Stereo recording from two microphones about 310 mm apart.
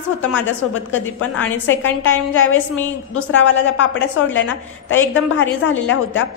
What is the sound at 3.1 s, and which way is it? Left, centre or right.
A woman's voice, left.